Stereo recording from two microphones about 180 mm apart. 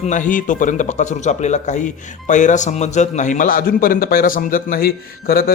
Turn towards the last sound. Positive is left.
turn(degrees=55)  # may be behind; listen again after turning